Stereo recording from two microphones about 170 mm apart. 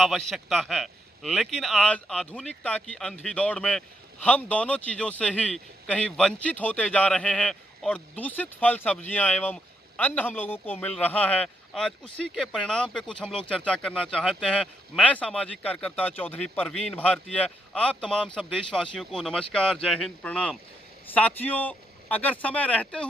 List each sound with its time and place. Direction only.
0.0 s a man's voice: centre (ahead or behind)